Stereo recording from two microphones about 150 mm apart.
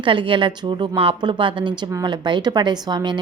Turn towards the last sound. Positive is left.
turn(degrees=-30)  # may be behind; listen again after turning